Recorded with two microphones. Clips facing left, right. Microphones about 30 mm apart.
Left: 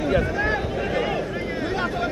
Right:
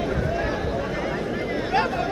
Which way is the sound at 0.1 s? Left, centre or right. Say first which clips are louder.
Left 3 dB; left.